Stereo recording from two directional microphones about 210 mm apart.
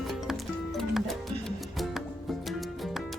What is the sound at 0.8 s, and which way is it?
Music, centre (ahead or behind).